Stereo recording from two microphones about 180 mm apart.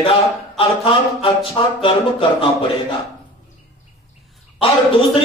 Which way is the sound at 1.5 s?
30° left (ahead or behind).